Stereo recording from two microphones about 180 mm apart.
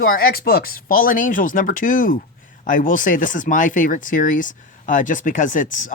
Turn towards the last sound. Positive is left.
turn(degrees=45)  # may be behind; listen again after turning